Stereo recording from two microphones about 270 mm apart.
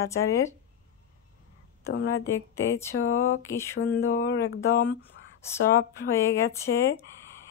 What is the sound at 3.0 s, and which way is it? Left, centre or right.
Speech, left.